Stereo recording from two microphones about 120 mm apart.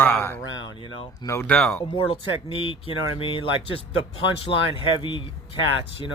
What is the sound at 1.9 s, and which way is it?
Speech, 50° left (ahead or behind).